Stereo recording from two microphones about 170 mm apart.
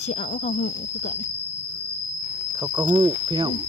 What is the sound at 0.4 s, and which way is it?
Speech, 45° left (ahead or behind).